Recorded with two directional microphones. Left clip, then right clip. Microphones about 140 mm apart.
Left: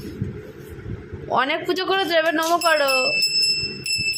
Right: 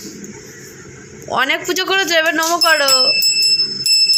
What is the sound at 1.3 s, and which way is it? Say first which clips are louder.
A woman's voice: right 4 dB; centre (ahead or behind).